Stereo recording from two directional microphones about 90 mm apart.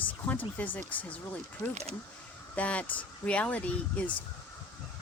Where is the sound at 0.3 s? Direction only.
15° left (ahead or behind).